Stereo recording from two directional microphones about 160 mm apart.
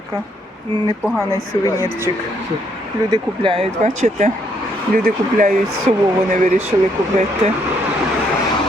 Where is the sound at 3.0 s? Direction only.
30° right (ahead or behind); by 6.7 s 45° right (ahead or behind).